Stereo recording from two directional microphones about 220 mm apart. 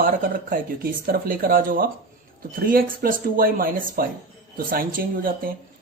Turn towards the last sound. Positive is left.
turn(degrees=-40)  # may be behind; listen again after turning